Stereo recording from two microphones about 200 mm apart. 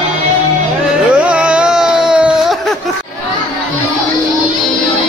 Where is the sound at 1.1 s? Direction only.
5° right (ahead or behind).